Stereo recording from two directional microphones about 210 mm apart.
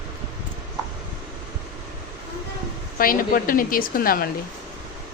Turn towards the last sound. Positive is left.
turn(degrees=45)  # may be behind; listen again after turning